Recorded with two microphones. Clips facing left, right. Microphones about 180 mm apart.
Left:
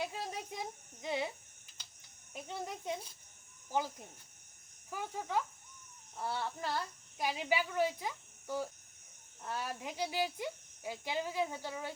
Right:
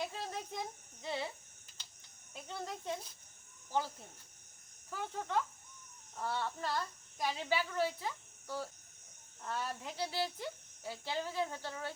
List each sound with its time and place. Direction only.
0.0 s speech: 10° left (ahead or behind)
2.3 s speech: 15° left (ahead or behind)